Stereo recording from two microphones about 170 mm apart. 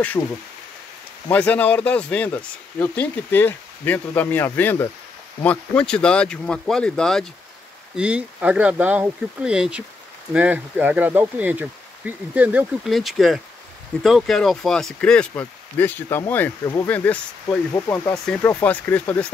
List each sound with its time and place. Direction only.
0.2 s speech: 20° left (ahead or behind)
1.3 s speech: 10° left (ahead or behind)
7.9 s speech: 5° right (ahead or behind); by 18.1 s 15° left (ahead or behind)
18.1 s speech: 5° left (ahead or behind)